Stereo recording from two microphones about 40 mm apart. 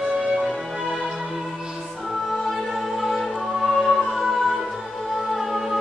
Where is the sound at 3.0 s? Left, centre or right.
Centre.